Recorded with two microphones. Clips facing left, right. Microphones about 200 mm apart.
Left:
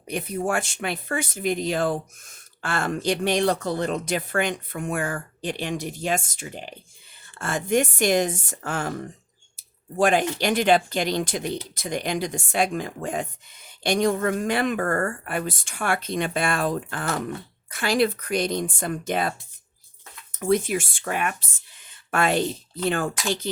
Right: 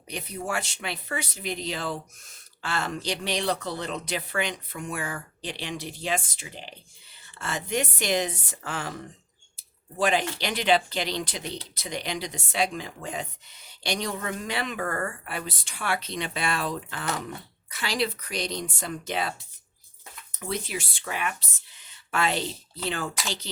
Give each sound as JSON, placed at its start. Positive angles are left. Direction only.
{"t": 0.1, "sound": "speech", "side_deg": 50}
{"t": 9.6, "sound": "a sound", "side_deg": 50}
{"t": 10.3, "sound": "speech", "side_deg": 50}
{"t": 20.4, "sound": "speech", "side_deg": 50}